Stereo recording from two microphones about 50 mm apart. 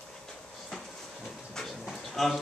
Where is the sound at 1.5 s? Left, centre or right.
Centre.